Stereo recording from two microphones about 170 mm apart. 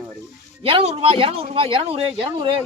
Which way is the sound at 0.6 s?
35° right (ahead or behind).